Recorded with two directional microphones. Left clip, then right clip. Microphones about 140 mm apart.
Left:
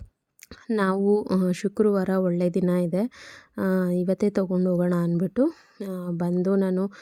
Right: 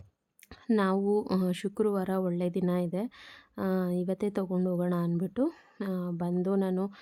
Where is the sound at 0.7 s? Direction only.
35° left (ahead or behind).